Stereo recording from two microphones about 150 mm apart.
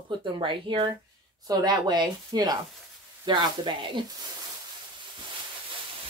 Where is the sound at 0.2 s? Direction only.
35° right (ahead or behind).